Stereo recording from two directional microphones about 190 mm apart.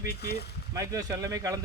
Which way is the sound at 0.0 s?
55° left (ahead or behind).